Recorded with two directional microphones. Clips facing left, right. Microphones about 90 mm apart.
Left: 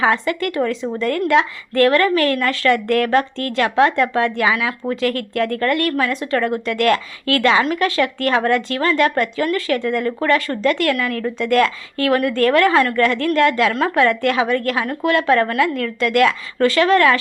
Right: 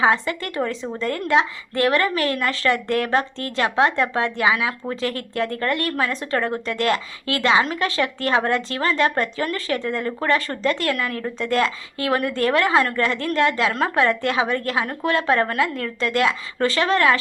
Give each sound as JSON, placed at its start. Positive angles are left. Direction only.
{"t": 0.0, "sound": "a woman's voice", "side_deg": -25}